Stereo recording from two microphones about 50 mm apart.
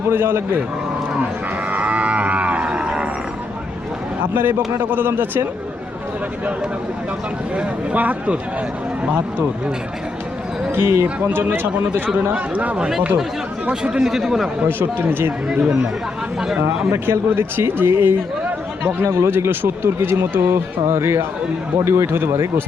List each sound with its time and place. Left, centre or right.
0.1 s speech: right
1.7 s livestock: right
4.4 s speech: right
4.9 s speech: right
7.9 s speech: right
10.8 s speech: right
11.3 s speech: right
12.3 s speech: right; by 14.5 s centre
14.7 s speech: right
15.5 s speech: centre
16.9 s speech: right
18.8 s speech: right